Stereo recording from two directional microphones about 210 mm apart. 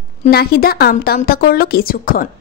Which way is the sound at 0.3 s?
50° left (ahead or behind).